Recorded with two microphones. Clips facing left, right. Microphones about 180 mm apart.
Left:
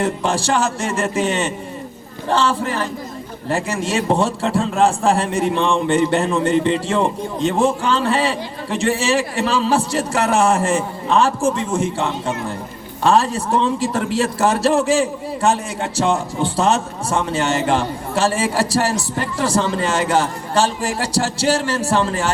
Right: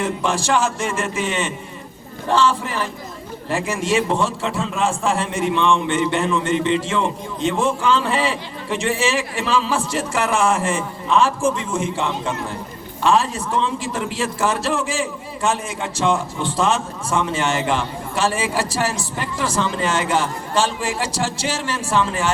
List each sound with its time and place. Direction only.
0.0 s a man's voice: 35° left (ahead or behind)